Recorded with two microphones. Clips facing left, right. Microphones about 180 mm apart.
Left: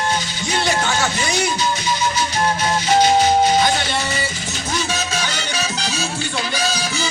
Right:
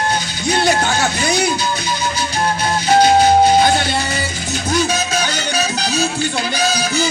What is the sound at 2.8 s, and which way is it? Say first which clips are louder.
Music: right 4 dB; 35° right (ahead or behind).